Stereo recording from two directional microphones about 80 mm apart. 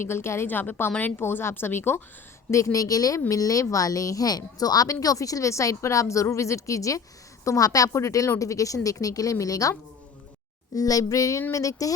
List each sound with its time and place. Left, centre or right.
0.0 s a woman's voice: left
2.5 s a woman's voice: left
10.8 s a woman's voice: left